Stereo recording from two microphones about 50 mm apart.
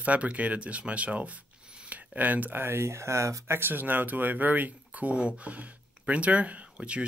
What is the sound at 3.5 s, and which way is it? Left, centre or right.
Speech, right.